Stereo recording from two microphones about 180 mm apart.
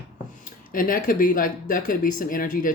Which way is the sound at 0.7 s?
50° left (ahead or behind).